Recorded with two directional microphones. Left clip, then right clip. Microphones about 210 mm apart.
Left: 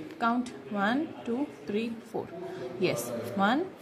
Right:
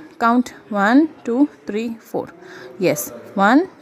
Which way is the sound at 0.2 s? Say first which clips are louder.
Right 12 dB; 45° right (ahead or behind).